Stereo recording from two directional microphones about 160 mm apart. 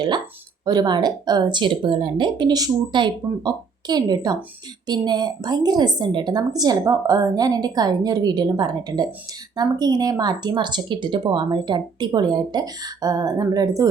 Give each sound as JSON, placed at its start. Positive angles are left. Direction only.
{"t": 0.6, "sound": "speech", "side_deg": -25}